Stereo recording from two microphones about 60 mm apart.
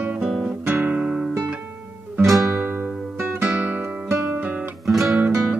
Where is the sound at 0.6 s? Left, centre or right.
Right.